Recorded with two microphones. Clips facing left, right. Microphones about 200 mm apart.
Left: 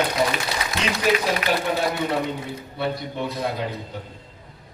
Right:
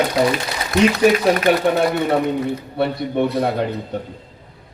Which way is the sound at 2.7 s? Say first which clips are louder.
Right 6 dB; 65° right (ahead or behind).